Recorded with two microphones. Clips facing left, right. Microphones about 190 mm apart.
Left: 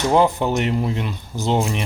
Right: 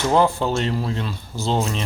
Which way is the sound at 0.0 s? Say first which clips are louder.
Left 1 dB; 15° left (ahead or behind).